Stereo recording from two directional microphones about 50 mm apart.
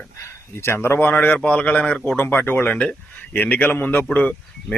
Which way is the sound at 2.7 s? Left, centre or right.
Left.